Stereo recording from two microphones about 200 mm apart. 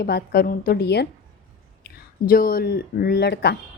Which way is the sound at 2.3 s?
45° left (ahead or behind).